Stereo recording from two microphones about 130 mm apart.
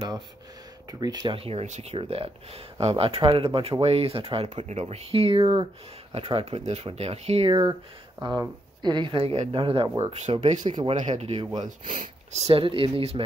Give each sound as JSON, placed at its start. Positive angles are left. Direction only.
{"t": 0.9, "sound": "speech", "side_deg": -30}
{"t": 4.6, "sound": "speech", "side_deg": -60}
{"t": 9.9, "sound": "speech", "side_deg": -55}
{"t": 12.4, "sound": "speech", "side_deg": -45}